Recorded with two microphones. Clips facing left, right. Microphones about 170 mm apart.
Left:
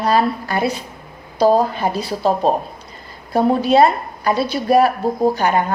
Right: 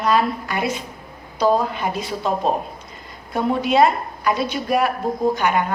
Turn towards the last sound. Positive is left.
turn(degrees=35)  # may be behind; listen again after turning